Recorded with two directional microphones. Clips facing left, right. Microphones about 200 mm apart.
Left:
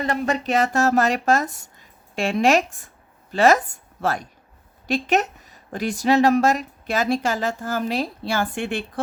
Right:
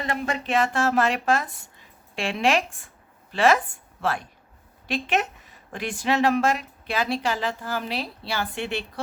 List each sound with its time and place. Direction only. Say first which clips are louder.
0.0 s speech: left 5 dB; 40° left (ahead or behind)